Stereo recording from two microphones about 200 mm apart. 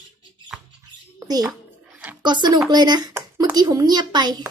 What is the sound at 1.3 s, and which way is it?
A child's voice, 20° right (ahead or behind).